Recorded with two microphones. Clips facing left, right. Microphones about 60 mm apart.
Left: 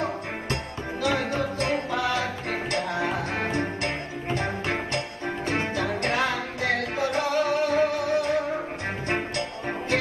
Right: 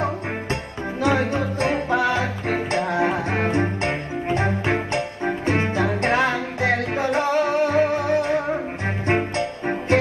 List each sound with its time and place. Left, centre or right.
1.0 s music: right